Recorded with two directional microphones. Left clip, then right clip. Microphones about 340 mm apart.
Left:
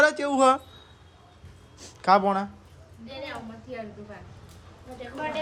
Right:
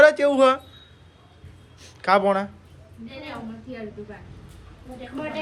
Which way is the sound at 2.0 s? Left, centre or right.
Centre.